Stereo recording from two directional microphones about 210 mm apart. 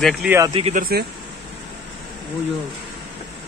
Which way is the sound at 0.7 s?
45° right (ahead or behind).